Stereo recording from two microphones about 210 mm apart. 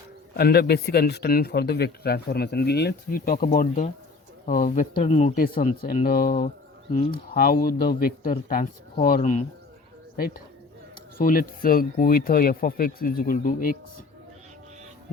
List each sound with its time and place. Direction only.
0.3 s speech: 50° left (ahead or behind)